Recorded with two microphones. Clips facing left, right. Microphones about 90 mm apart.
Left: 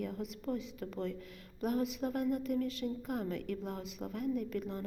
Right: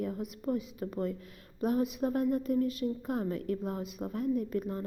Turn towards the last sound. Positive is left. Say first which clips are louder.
# right 4 dB
turn(degrees=-30)  # may be behind; listen again after turning